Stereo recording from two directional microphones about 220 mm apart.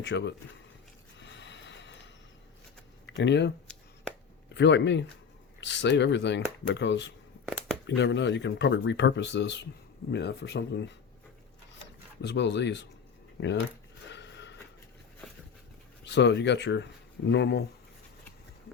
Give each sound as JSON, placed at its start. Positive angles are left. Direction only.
{"t": 0.0, "sound": "speech", "side_deg": 55}
{"t": 1.2, "sound": "train", "side_deg": 55}
{"t": 3.1, "sound": "speech", "side_deg": 55}
{"t": 4.5, "sound": "speech", "side_deg": 55}
{"t": 7.4, "sound": "a sound", "side_deg": 0}
{"t": 7.9, "sound": "speech", "side_deg": 50}
{"t": 12.2, "sound": "speech", "side_deg": 50}
{"t": 14.1, "sound": "a sound", "side_deg": 55}
{"t": 16.0, "sound": "speech", "side_deg": 50}